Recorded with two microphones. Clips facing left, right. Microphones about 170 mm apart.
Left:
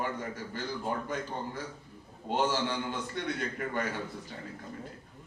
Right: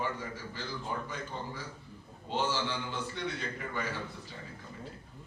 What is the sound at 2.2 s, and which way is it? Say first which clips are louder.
A man's voice: left 3 dB; 50° left (ahead or behind).